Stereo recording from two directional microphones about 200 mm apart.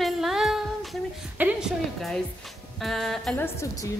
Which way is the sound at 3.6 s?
15° left (ahead or behind).